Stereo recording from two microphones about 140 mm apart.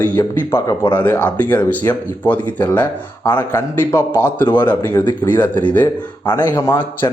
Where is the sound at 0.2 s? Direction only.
20° left (ahead or behind).